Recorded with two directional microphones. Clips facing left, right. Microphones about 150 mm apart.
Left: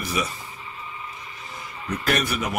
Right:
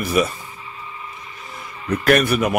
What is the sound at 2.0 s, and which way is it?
Speech, 55° right (ahead or behind).